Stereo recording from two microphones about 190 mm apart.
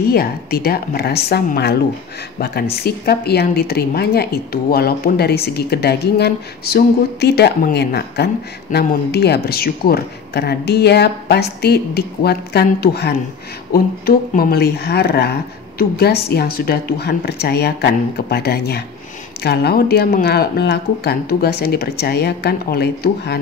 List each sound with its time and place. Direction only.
0.0 s a woman's voice: 55° left (ahead or behind)